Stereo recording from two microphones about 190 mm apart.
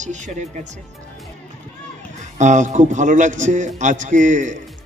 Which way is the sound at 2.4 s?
40° right (ahead or behind).